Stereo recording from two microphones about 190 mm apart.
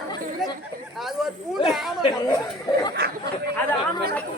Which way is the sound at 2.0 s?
20° left (ahead or behind).